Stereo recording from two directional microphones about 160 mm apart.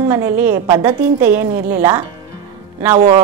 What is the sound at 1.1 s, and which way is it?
Speech, 10° right (ahead or behind).